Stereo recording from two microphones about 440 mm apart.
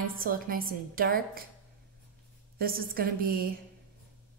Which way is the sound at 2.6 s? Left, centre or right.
Centre.